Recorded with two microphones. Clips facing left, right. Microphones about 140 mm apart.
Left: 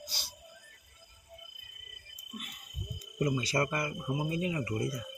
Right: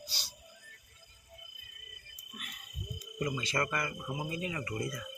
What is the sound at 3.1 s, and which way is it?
Speech, 35° left (ahead or behind).